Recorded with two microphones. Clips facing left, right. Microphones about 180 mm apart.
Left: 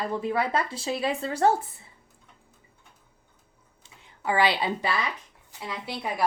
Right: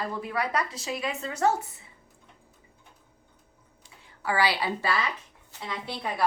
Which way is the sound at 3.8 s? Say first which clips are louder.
Left 2 dB; 20° left (ahead or behind).